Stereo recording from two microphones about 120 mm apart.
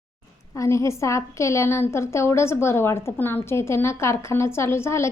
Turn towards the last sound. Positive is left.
turn(degrees=20)  # may be behind; listen again after turning